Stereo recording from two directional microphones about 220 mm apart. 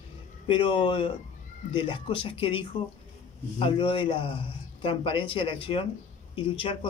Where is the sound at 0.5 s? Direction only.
20° left (ahead or behind).